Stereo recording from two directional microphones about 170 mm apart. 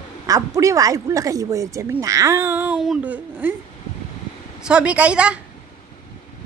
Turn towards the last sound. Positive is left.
turn(degrees=-5)  # may be behind; listen again after turning